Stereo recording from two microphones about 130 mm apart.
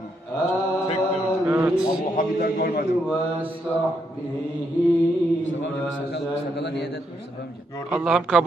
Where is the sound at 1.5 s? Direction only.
15° right (ahead or behind).